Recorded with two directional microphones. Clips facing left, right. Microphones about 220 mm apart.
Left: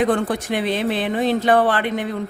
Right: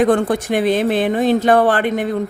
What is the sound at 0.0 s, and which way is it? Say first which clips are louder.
Speech: right 4 dB; 50° right (ahead or behind).